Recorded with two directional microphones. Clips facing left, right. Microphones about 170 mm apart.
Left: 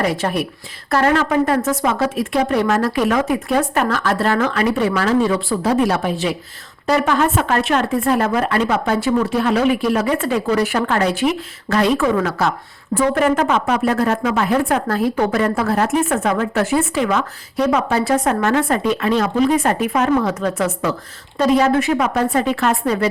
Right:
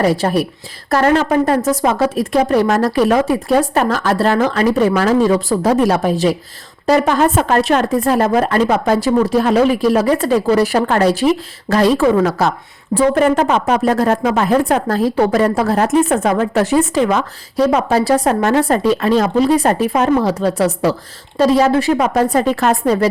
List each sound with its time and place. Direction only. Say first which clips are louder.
0.0 s a woman's voice: right 5 dB; 35° right (ahead or behind)